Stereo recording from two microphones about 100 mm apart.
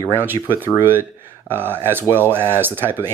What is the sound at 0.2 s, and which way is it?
Speech, 20° right (ahead or behind).